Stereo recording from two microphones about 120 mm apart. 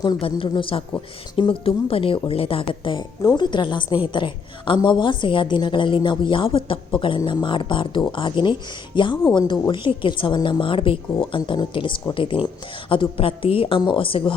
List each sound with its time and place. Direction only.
0.2 s a woman's voice: 50° left (ahead or behind)
3.2 s a woman's voice: 35° left (ahead or behind)